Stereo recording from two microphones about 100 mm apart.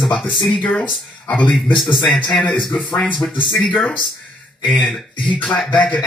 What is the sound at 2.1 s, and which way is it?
Speech, 15° left (ahead or behind).